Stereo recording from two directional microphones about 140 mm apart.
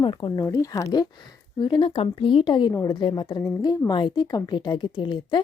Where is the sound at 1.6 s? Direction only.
35° left (ahead or behind).